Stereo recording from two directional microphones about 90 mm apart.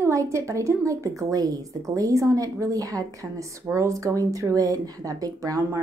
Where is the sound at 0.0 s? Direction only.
35° right (ahead or behind).